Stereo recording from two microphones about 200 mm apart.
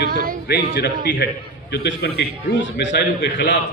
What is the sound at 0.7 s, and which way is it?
A man's voice, 60° left (ahead or behind).